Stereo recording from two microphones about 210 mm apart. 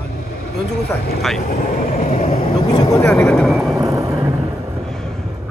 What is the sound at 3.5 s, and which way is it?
Vehicle, centre (ahead or behind).